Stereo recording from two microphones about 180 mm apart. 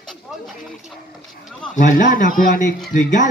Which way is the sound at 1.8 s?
45° left (ahead or behind).